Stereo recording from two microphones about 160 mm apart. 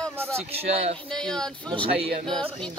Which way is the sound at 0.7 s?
40° right (ahead or behind).